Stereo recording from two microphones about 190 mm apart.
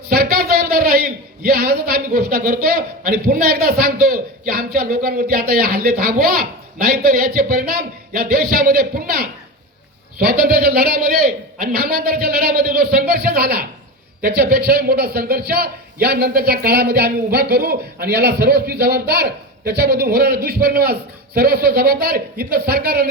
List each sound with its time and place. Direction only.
0.1 s a man's voice: 50° right (ahead or behind)